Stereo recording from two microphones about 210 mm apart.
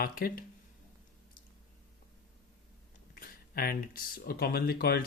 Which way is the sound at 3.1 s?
45° left (ahead or behind).